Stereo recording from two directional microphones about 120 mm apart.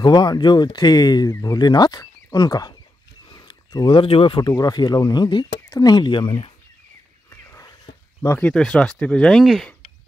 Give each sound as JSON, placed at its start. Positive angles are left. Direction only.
{"t": 0.0, "sound": "speech", "side_deg": 35}
{"t": 7.2, "sound": "a sound", "side_deg": 25}
{"t": 8.4, "sound": "speech", "side_deg": 10}